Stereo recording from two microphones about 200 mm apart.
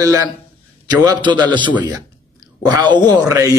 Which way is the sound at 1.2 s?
20° right (ahead or behind).